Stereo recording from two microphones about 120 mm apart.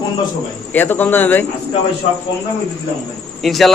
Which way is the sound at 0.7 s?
15° left (ahead or behind).